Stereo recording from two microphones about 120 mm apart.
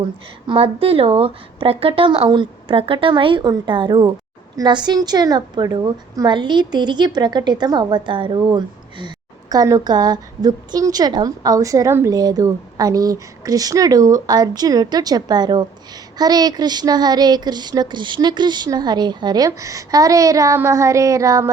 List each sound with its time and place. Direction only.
0.0 s a woman's voice: 45° right (ahead or behind); by 21.5 s 25° right (ahead or behind)